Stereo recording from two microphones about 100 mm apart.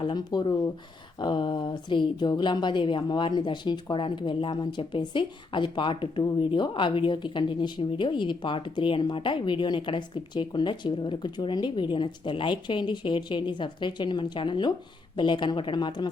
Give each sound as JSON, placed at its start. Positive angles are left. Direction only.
{"t": 0.0, "sound": "speech", "side_deg": 45}